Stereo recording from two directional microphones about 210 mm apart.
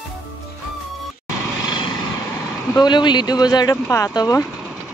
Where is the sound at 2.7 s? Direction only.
20° left (ahead or behind).